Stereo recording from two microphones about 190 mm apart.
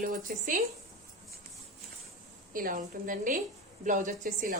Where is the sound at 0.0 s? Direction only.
45° right (ahead or behind).